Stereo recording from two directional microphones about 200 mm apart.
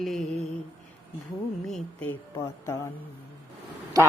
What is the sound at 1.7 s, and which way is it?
Speech, 5° left (ahead or behind).